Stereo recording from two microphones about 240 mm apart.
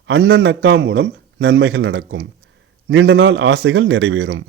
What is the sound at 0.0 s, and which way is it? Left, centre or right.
A man's voice, right.